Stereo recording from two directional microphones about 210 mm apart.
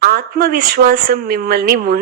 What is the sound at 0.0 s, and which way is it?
Speech, 45° right (ahead or behind).